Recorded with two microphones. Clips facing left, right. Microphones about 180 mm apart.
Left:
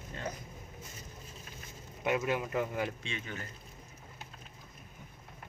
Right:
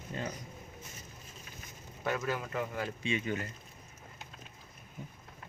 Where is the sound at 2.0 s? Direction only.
15° left (ahead or behind).